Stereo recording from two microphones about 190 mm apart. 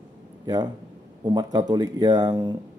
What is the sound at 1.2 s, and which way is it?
A man's voice, 20° right (ahead or behind).